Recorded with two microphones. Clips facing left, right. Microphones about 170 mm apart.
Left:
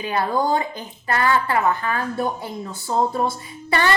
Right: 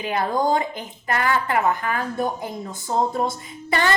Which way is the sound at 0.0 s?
20° right (ahead or behind).